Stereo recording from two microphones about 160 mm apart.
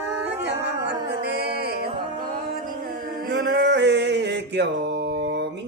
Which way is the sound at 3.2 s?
85° right.